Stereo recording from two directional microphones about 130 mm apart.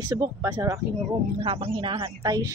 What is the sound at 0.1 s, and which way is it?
Speech, 30° right (ahead or behind).